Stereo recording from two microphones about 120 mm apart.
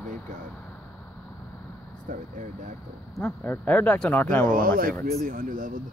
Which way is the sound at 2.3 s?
90° right.